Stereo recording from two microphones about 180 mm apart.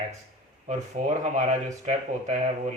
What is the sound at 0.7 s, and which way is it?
Speech, 35° right (ahead or behind).